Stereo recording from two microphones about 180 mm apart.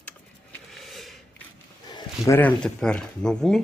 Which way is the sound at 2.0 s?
20° left (ahead or behind).